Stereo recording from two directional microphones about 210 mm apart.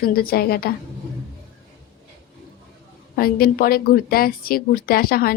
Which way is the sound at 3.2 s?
45° left (ahead or behind).